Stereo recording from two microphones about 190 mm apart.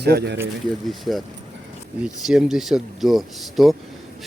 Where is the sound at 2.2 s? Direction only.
Centre (ahead or behind).